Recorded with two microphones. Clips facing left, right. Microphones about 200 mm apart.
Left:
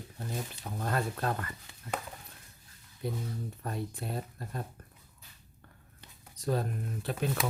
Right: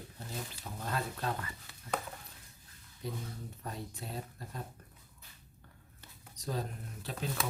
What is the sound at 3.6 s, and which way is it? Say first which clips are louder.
Speech: left 4 dB; 55° left (ahead or behind).